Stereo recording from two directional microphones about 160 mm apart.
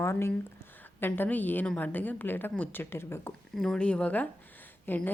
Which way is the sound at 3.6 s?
5° left (ahead or behind).